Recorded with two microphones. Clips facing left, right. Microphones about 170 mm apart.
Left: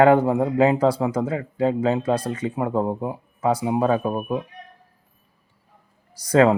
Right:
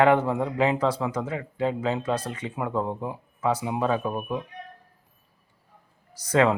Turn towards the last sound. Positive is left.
turn(degrees=35)  # may be behind; listen again after turning